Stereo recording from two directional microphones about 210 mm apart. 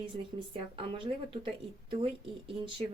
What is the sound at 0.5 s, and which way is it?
Speech, 25° right (ahead or behind).